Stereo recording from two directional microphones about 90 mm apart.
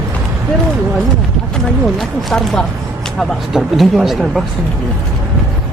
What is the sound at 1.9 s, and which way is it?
Speech, 5° left (ahead or behind).